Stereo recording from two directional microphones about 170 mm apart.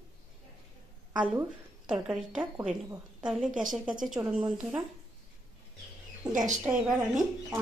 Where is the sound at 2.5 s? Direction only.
15° right (ahead or behind).